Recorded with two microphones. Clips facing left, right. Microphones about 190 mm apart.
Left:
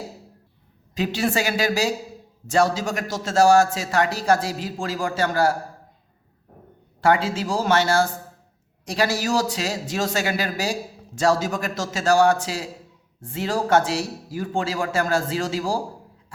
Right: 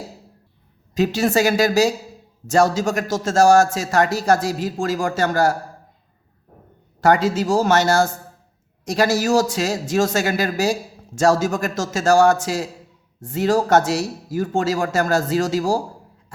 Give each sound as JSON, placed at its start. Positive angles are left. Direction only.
{"t": 0.9, "sound": "a man's voice", "side_deg": -45}
{"t": 7.0, "sound": "a man's voice", "side_deg": -40}